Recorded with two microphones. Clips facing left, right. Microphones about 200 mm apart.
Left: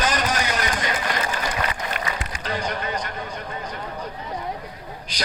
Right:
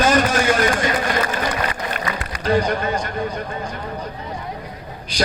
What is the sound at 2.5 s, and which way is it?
Speech, 45° right (ahead or behind).